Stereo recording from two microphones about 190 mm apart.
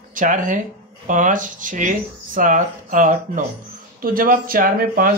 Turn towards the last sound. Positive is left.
turn(degrees=-50)  # may be behind; listen again after turning